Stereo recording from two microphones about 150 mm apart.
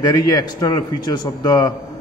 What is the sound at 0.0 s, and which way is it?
A man's voice, 25° left (ahead or behind).